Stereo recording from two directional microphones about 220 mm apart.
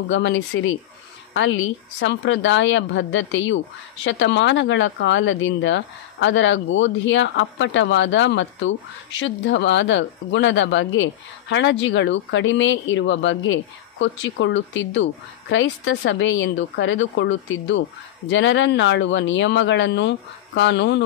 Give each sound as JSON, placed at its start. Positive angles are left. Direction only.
{"t": 0.1, "sound": "a woman's voice", "side_deg": 60}